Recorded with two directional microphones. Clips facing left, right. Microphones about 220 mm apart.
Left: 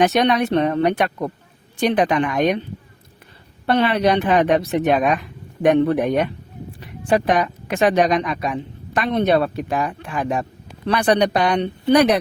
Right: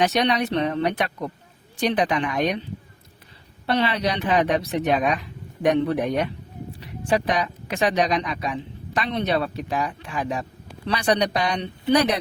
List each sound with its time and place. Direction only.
0.0 s speech: 50° left (ahead or behind)
3.7 s speech: 55° left (ahead or behind)